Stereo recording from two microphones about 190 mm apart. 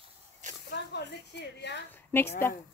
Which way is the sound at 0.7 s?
65° left (ahead or behind).